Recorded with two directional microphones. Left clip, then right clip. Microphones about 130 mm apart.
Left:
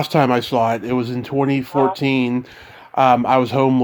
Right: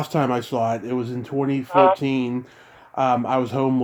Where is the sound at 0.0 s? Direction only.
30° left (ahead or behind).